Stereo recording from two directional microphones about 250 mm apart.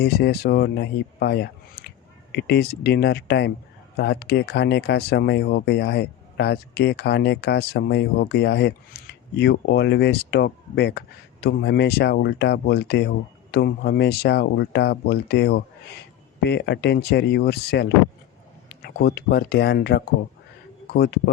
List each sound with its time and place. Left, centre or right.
0.0 s speech: left